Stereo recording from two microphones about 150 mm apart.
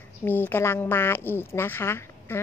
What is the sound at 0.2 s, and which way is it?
Speech, 15° left (ahead or behind).